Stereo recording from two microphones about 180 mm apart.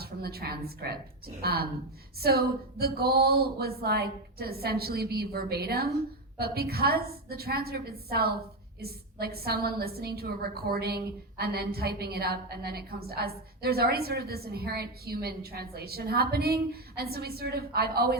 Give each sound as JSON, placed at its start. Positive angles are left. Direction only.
{"t": 0.0, "sound": "a woman's voice", "side_deg": -60}